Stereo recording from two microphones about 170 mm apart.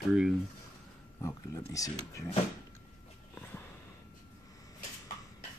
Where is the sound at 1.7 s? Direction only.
20° left (ahead or behind).